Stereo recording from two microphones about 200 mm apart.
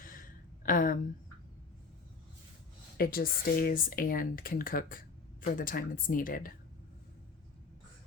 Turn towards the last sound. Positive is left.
turn(degrees=45)  # may be behind; listen again after turning